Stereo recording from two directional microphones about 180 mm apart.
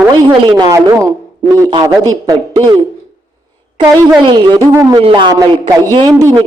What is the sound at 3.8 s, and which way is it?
A man's voice, 25° right (ahead or behind).